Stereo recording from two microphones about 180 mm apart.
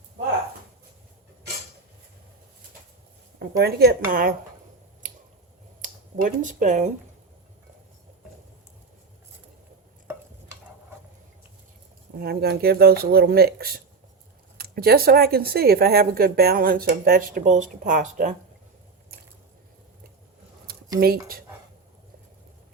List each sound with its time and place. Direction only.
3.6 s speech: 60° right (ahead or behind)
5.8 s speech: 45° right (ahead or behind)
12.2 s speech: 60° right (ahead or behind); by 18.3 s 45° right (ahead or behind)